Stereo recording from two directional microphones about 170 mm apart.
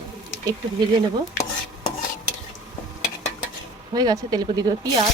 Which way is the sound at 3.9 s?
25° right (ahead or behind).